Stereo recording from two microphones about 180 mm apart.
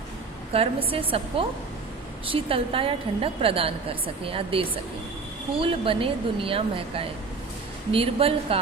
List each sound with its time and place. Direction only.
0.5 s a woman's voice: 30° right (ahead or behind)